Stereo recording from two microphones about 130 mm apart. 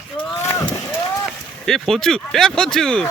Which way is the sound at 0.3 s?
20° left (ahead or behind).